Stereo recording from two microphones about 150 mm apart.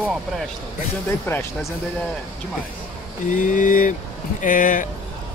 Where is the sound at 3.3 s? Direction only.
60° left (ahead or behind).